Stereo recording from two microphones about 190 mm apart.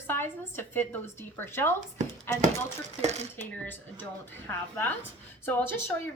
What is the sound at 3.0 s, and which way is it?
Speech, 35° right (ahead or behind).